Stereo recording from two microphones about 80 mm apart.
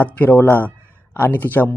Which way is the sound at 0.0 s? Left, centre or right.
Left.